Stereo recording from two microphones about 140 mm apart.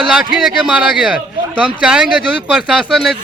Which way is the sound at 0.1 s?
5° right (ahead or behind).